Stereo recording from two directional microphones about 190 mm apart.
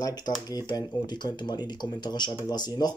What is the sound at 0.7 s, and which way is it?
Speech, 20° left (ahead or behind).